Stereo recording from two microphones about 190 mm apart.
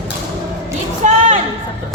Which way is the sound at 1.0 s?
40° right (ahead or behind).